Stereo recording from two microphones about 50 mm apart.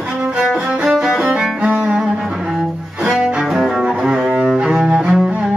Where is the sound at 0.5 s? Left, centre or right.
Centre.